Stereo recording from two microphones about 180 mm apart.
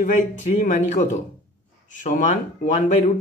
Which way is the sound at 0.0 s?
45° left (ahead or behind).